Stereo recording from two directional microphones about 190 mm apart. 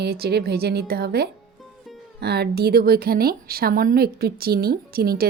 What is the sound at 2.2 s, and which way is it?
A woman's voice, 60° right (ahead or behind).